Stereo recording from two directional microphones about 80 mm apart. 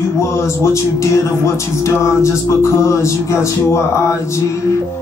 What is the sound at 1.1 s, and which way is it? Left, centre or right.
Mantra, left.